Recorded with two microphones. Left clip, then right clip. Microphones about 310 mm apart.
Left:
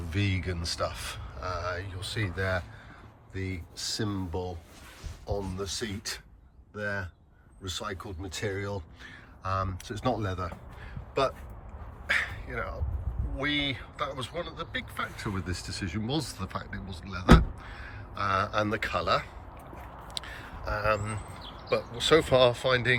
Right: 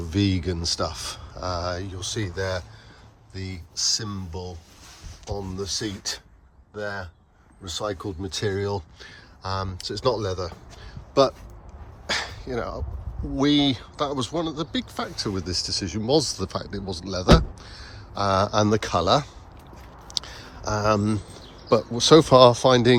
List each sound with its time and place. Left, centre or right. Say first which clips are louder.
0.0 s speech: right 8 dB; centre
7.6 s speech: right 7 dB; centre
12.0 s dog: right 1 dB; centre
13.4 s speech: right 8 dB; centre
20.1 s a sound: right 8 dB; centre
21.7 s speech: right 8 dB; centre